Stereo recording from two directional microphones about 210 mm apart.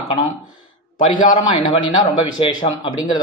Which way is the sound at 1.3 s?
25° left (ahead or behind).